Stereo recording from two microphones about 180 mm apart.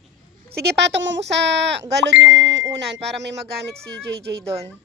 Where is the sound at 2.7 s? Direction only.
75° right (ahead or behind).